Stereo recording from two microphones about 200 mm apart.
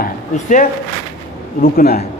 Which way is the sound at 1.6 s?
50° left (ahead or behind).